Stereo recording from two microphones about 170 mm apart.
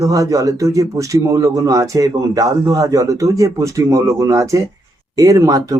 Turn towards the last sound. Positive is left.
turn(degrees=-20)  # may be behind; listen again after turning